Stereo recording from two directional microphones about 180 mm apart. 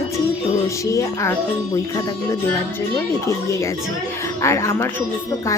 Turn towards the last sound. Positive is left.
turn(degrees=15)  # may be behind; listen again after turning